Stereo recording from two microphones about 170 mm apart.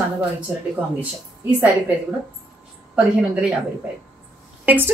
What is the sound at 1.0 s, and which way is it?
Speech, 10° right (ahead or behind).